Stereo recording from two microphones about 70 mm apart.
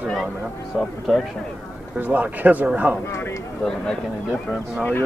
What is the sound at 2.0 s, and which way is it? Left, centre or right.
Speech, right.